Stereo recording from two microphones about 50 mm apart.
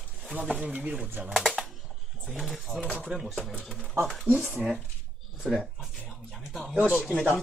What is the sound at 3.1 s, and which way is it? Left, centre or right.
Speech, right.